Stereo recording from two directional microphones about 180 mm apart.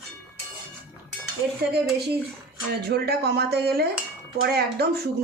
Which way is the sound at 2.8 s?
65° right (ahead or behind).